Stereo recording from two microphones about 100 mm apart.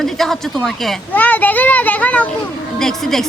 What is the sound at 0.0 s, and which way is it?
Speech, 5° left (ahead or behind).